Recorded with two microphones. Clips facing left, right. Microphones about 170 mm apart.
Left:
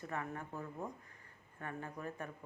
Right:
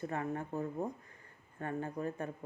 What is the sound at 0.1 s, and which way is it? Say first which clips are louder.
Speech: right 6 dB; 35° right (ahead or behind).